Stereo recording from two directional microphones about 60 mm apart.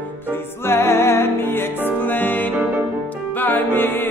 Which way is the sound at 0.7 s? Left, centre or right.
Left.